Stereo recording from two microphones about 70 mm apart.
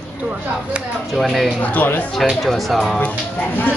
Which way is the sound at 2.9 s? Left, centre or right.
Left.